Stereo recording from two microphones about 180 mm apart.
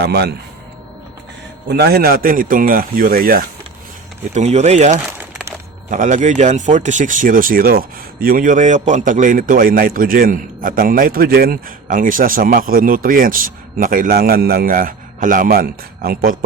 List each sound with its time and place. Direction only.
0.0 s speech: 65° right (ahead or behind)
1.6 s speech: 65° right (ahead or behind)
4.4 s speech: 40° right (ahead or behind)